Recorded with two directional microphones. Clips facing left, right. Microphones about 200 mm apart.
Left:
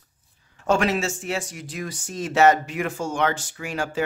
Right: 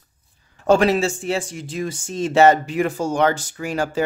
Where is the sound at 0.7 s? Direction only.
35° right (ahead or behind).